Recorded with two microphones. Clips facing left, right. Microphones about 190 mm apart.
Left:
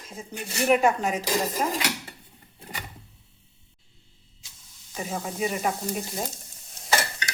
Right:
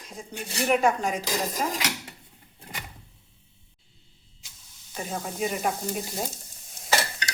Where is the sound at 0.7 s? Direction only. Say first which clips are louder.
Left 2 dB; 5° left (ahead or behind).